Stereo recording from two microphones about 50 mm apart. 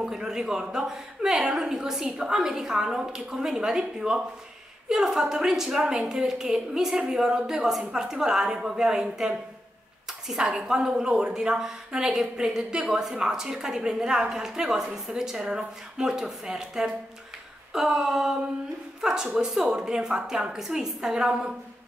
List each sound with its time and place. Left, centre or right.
0.0 s a woman's voice: centre
10.7 s a woman's voice: centre
17.7 s a sound: centre
18.9 s a woman's voice: centre
19.5 s a sound: centre
19.8 s a woman's voice: centre